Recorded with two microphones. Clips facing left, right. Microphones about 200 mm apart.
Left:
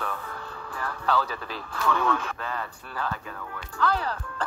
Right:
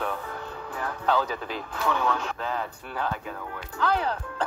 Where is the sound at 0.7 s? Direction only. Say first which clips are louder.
Right 1 dB; 20° right (ahead or behind).